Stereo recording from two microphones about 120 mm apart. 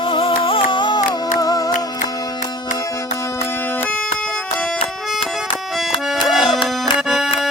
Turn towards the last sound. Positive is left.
turn(degrees=0)  # may be behind; listen again after turning